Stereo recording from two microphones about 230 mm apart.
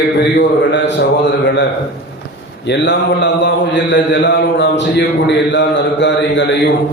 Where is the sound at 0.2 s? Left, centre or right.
Left.